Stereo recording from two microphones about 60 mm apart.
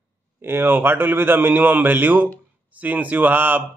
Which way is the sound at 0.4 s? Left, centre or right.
Right.